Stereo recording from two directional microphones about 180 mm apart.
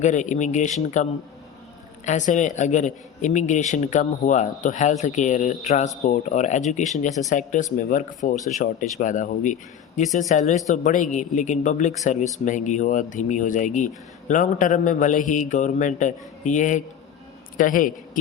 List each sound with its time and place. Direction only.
0.0 s speech: 40° left (ahead or behind)
2.0 s speech: 40° left (ahead or behind)